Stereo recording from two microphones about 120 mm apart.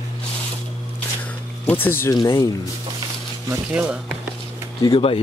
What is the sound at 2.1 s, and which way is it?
Speech, 30° left (ahead or behind).